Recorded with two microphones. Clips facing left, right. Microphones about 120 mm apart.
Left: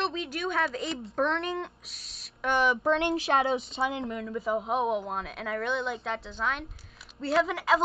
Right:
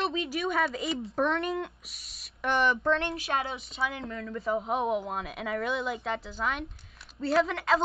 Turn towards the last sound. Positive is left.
turn(degrees=0)  # may be behind; listen again after turning